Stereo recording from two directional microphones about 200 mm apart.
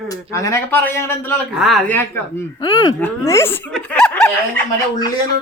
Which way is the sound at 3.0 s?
15° left (ahead or behind).